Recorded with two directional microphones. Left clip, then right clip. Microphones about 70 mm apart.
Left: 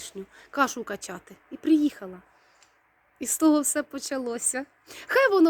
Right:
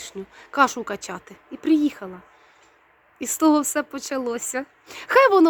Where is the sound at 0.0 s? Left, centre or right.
Right.